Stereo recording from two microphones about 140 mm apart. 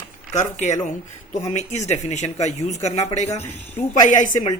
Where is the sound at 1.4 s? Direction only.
55° left (ahead or behind).